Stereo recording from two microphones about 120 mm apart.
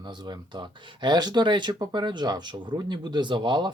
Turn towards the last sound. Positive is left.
turn(degrees=-40)  # may be behind; listen again after turning